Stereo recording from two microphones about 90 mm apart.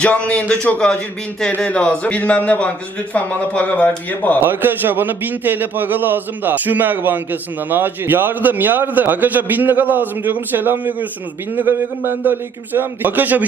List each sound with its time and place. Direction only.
0.0 s a man's voice: 15° left (ahead or behind)
4.4 s a man's voice: 25° right (ahead or behind)